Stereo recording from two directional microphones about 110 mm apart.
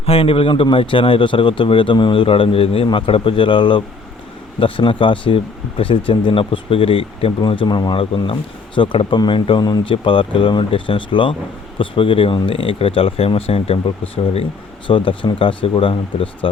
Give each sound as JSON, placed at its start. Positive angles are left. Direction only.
{"t": 0.0, "sound": "speech", "side_deg": 60}
{"t": 9.9, "sound": "speech", "side_deg": 50}
{"t": 14.8, "sound": "speech", "side_deg": 50}